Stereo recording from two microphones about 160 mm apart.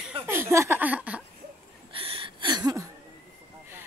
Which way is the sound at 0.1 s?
15° right (ahead or behind).